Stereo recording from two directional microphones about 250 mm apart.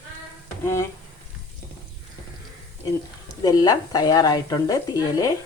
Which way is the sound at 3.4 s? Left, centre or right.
Centre.